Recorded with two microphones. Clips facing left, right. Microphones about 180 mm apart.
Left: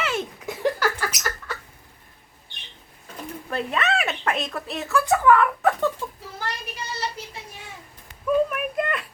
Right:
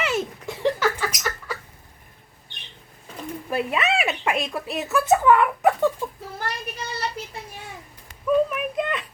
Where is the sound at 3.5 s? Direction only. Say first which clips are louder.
Right 1 dB; 5° right (ahead or behind).